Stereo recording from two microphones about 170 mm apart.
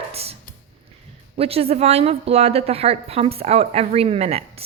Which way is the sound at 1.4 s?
35° right (ahead or behind).